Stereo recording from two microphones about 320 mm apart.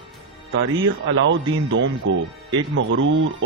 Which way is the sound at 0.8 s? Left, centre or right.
Right.